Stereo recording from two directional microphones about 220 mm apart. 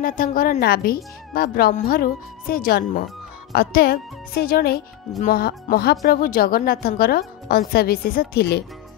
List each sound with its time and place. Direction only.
0.0 s a woman's voice: 40° left (ahead or behind)